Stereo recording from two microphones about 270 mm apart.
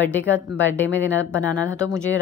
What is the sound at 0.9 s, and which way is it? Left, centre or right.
Speech, centre.